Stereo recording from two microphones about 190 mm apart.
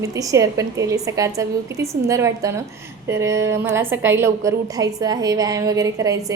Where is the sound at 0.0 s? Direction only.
15° right (ahead or behind).